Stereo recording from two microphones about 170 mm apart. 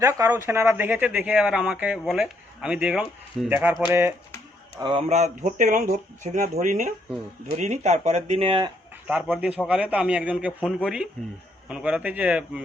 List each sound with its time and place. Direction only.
0.0 s a man's voice: 20° right (ahead or behind)
4.8 s speech: 30° right (ahead or behind)
9.0 s a man's voice: 5° right (ahead or behind)